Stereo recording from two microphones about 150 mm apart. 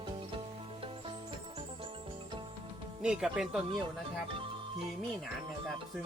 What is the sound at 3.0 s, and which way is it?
Speech, 5° right (ahead or behind).